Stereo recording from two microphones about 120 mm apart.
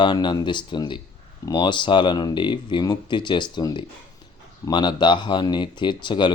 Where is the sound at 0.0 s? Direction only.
40° left (ahead or behind).